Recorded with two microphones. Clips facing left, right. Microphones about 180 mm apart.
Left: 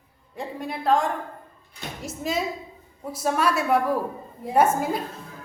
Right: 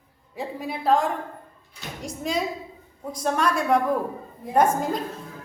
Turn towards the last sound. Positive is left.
turn(degrees=5)  # may be behind; listen again after turning